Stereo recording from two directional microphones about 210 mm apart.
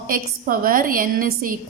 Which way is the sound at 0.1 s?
40° right (ahead or behind).